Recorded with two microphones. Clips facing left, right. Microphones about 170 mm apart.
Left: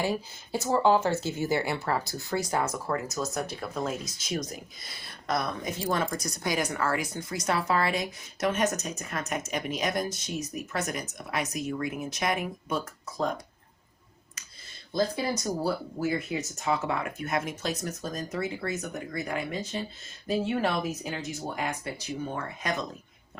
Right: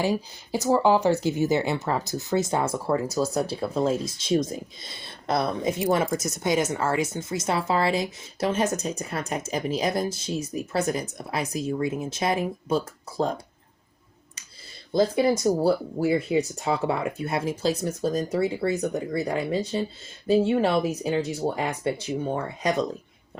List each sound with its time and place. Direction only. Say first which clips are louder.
0.0 s speech: right 4 dB; 15° right (ahead or behind)
14.9 s speech: right 7 dB; 25° right (ahead or behind)